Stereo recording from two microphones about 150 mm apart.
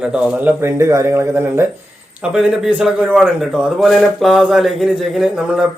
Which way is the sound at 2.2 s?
5° right (ahead or behind).